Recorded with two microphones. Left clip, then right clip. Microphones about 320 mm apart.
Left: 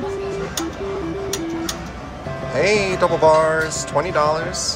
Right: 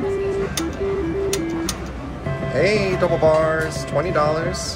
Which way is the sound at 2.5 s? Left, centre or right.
Centre.